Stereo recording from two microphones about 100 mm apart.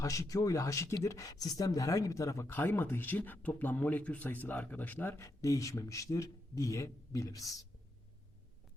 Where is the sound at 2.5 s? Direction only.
20° left (ahead or behind).